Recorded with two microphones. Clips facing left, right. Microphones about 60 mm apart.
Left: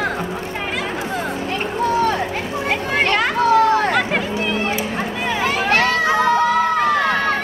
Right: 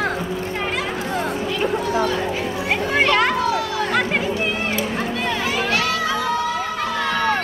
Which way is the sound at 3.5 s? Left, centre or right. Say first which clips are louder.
Left 8 dB; left.